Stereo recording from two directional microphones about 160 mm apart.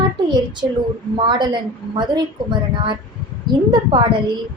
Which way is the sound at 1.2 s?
30° right (ahead or behind).